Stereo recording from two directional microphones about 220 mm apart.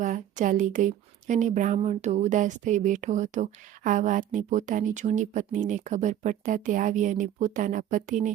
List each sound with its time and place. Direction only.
0.0 s a woman's voice: 35° right (ahead or behind)